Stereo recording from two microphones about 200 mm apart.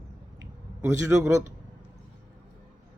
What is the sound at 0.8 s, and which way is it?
Speech, 15° right (ahead or behind).